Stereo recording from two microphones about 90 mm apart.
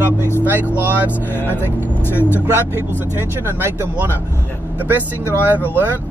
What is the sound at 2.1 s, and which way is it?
Speech, 25° left (ahead or behind).